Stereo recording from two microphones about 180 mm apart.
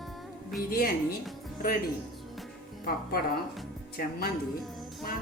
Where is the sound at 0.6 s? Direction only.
55° left (ahead or behind).